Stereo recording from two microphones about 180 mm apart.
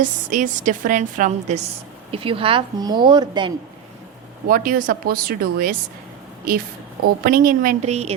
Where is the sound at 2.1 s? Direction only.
30° right (ahead or behind).